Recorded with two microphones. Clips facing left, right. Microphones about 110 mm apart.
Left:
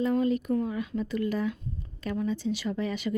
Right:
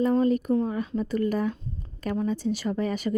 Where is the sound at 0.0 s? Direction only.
40° right (ahead or behind).